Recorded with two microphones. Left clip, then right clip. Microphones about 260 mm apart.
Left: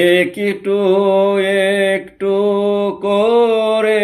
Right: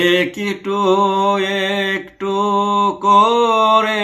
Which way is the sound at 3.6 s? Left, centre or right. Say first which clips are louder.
Right 1 dB; right.